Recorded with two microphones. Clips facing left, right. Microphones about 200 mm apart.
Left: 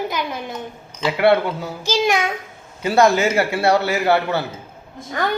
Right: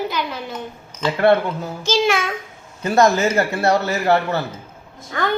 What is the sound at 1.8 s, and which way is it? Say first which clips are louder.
A child's voice: even; 15° left (ahead or behind).